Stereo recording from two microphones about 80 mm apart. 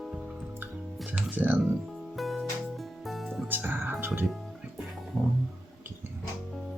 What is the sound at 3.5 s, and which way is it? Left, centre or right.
Music, right.